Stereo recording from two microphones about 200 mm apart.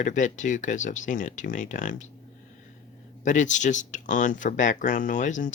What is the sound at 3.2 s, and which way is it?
Speech, 40° left (ahead or behind).